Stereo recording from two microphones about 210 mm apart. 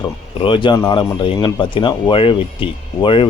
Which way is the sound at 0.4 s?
25° left (ahead or behind).